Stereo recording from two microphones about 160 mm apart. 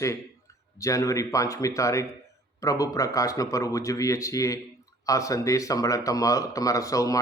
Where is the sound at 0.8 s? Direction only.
20° left (ahead or behind).